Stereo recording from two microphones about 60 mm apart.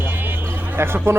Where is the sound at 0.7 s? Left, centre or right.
Right.